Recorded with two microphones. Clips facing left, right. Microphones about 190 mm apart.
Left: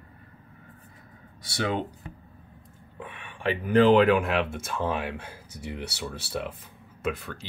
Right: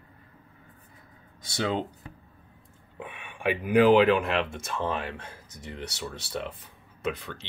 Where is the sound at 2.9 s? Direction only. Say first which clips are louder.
Right 1 dB; 15° right (ahead or behind).